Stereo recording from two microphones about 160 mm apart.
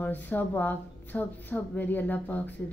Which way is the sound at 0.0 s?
10° left (ahead or behind).